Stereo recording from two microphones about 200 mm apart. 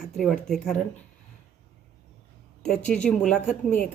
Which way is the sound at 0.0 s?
Centre (ahead or behind).